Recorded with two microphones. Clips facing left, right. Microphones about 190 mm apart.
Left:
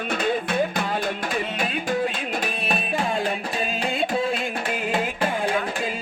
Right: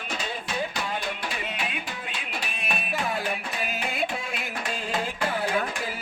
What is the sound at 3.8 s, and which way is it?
Music, 30° left (ahead or behind).